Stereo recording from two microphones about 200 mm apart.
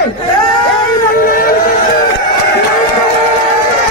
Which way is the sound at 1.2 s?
45° left (ahead or behind).